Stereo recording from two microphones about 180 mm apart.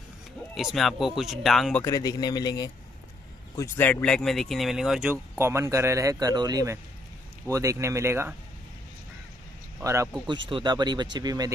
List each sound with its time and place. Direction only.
0.6 s speech: centre (ahead or behind)
1.8 s speech: 20° left (ahead or behind); by 5.1 s centre (ahead or behind)
5.4 s a man's voice: 15° right (ahead or behind)
9.8 s speech: 15° right (ahead or behind)